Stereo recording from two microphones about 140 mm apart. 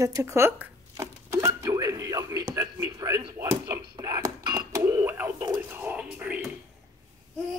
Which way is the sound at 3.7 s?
30° right (ahead or behind).